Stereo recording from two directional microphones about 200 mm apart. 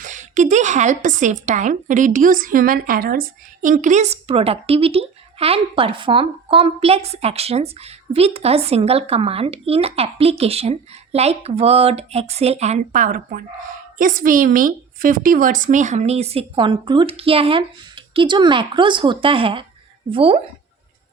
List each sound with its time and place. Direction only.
0.0 s a woman's voice: 40° right (ahead or behind)